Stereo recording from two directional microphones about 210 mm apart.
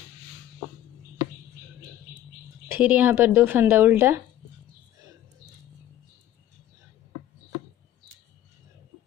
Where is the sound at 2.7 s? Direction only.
5° right (ahead or behind).